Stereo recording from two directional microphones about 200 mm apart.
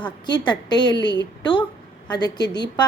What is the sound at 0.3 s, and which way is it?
A woman's voice, 20° left (ahead or behind).